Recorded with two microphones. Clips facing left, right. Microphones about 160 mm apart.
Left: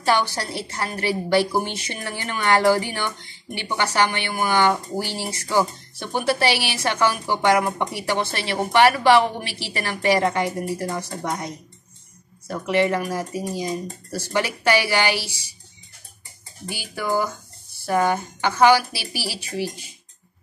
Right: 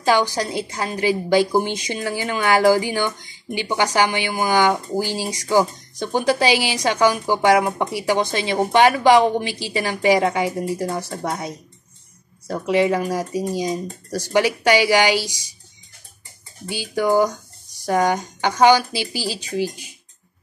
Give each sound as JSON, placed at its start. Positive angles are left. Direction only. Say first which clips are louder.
{"t": 0.0, "sound": "a woman's voice", "louder": "right 3 dB", "side_deg": -15}
{"t": 12.6, "sound": "a woman's voice", "louder": "right 2 dB", "side_deg": -15}
{"t": 16.6, "sound": "a woman's voice", "louder": "right 7 dB", "side_deg": -20}